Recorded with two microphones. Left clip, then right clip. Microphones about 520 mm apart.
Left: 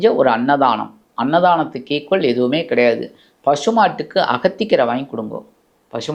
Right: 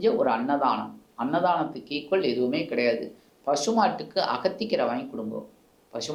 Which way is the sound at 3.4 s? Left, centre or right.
Left.